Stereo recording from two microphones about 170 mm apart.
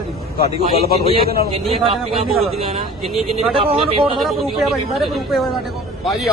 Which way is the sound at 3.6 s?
35° right (ahead or behind).